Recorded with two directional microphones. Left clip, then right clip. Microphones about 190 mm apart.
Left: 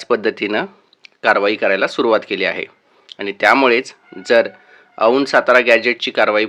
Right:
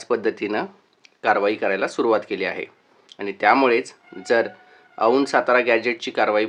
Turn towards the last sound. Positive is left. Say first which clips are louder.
# left 5 dB
turn(degrees=20)  # may be behind; listen again after turning